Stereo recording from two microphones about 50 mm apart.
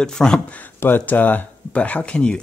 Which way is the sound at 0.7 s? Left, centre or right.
Left.